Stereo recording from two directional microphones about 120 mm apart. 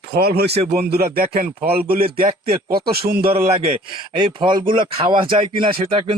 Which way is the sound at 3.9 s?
40° right (ahead or behind).